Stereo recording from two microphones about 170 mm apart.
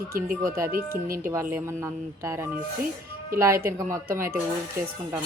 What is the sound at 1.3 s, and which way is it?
Speech, 15° right (ahead or behind).